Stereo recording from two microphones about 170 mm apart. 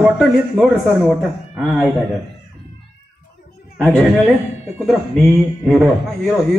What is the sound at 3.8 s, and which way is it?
Speech, 10° left (ahead or behind).